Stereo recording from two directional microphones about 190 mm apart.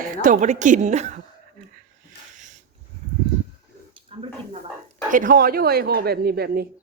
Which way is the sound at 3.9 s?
30° right (ahead or behind).